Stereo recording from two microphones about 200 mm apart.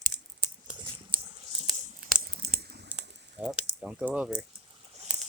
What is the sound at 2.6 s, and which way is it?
Typing, 55° right (ahead or behind).